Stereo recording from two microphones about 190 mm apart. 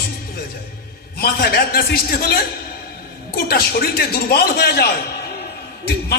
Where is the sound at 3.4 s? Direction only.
55° left (ahead or behind).